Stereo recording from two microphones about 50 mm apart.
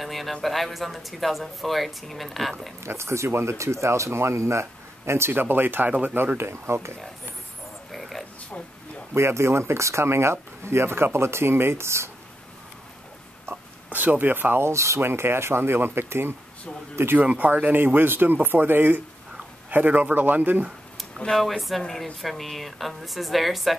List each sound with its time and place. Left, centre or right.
0.0 s speech: centre
2.8 s speech: right
5.3 s speech: right
6.1 s speech: right
7.9 s a sound: centre
9.1 s speech: right
13.8 s speech: right
14.6 s speech: right
15.0 s speech: right
17.2 s speech: right
21.3 s speech: centre